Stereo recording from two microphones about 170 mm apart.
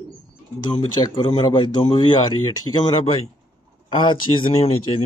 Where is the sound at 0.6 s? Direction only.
25° left (ahead or behind).